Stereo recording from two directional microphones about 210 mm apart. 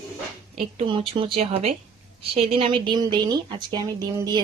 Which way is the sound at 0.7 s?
25° right (ahead or behind).